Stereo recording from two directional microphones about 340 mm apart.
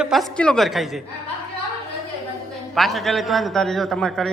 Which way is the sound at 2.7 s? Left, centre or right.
Centre.